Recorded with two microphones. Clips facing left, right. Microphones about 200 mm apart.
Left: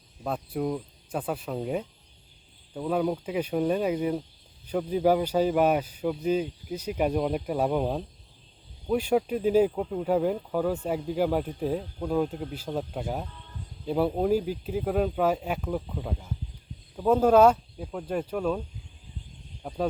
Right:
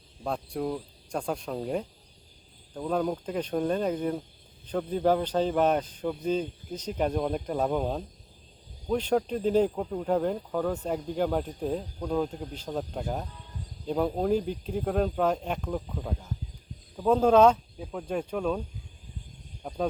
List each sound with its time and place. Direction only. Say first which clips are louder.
0.3 s speech: left 1 dB; 5° left (ahead or behind)
19.6 s speech: left 1 dB; 5° left (ahead or behind)